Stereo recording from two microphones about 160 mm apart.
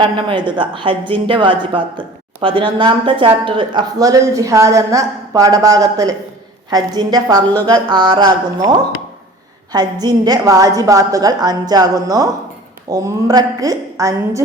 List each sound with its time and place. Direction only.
0.2 s speech: 30° right (ahead or behind)